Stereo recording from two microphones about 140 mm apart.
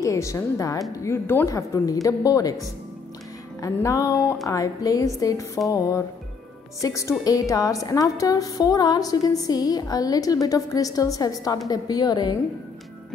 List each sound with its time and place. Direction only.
0.0 s a woman's voice: 20° left (ahead or behind)
3.6 s a woman's voice: 25° left (ahead or behind)